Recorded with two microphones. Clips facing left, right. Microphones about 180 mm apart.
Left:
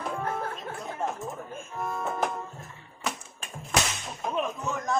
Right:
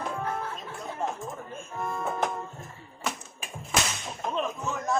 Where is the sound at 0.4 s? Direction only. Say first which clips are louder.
Left 2 dB; 55° left (ahead or behind).